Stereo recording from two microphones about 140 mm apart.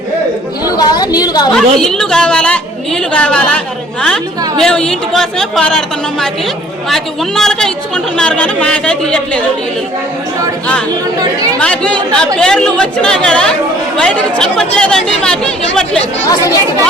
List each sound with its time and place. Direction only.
0.6 s a sound: 30° left (ahead or behind)
1.5 s speech: 5° left (ahead or behind)
11.2 s speech: 25° right (ahead or behind)
11.6 s speech: 10° left (ahead or behind)